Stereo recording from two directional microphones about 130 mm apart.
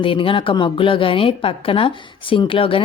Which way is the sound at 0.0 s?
40° left (ahead or behind).